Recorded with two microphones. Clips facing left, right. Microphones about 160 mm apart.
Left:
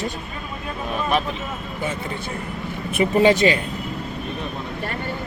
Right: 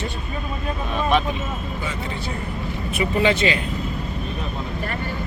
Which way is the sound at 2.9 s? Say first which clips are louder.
Left 4 dB; 45° left (ahead or behind).